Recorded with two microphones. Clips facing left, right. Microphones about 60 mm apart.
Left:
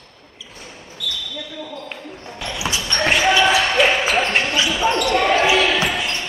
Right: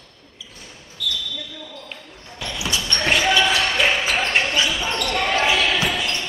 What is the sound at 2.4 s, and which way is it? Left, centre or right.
Basketball bounce, centre.